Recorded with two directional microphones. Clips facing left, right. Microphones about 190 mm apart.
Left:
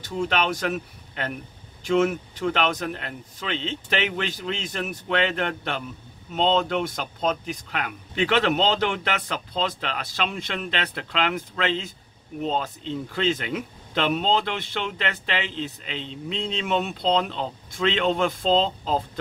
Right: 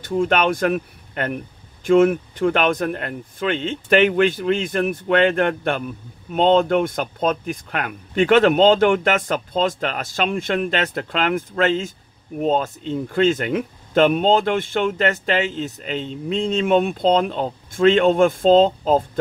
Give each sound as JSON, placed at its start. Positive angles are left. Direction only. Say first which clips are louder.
{"t": 0.0, "sound": "speech", "louder": "right 6 dB", "side_deg": -50}